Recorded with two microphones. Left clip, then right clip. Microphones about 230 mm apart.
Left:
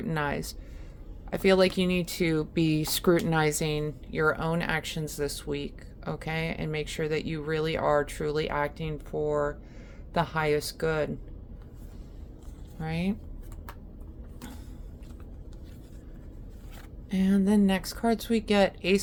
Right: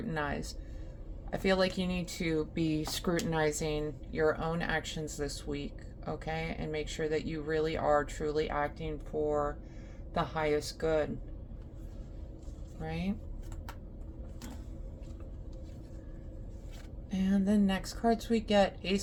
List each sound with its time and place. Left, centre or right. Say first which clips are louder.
0.1 s speech: left 5 dB; left
12.8 s speech: left 5 dB; left
17.1 s speech: left 5 dB; left